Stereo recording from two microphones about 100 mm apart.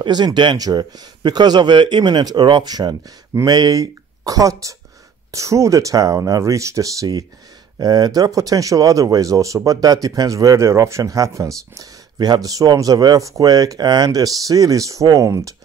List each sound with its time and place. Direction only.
0.0 s speech: 45° right (ahead or behind)